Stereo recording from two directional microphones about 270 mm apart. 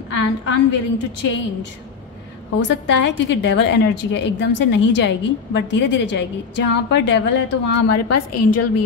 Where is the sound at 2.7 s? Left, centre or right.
Left.